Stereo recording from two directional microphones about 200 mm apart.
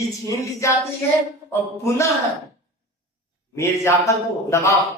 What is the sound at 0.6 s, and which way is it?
Speech, 15° left (ahead or behind).